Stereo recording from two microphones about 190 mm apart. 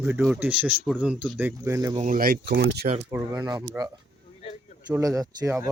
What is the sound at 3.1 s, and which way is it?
Speech, 15° right (ahead or behind).